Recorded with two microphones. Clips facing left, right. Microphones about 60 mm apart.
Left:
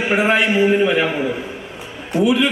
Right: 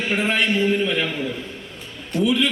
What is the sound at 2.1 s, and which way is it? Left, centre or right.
Speech, centre.